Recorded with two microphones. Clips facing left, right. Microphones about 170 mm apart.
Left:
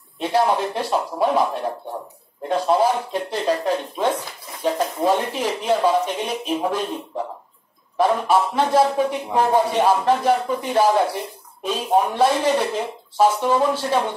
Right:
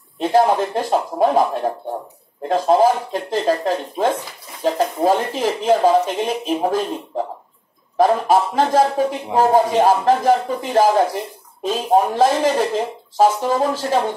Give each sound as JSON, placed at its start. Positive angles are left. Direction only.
{"t": 0.2, "sound": "speech", "side_deg": -45}
{"t": 2.4, "sound": "speech", "side_deg": -45}
{"t": 8.0, "sound": "speech", "side_deg": -45}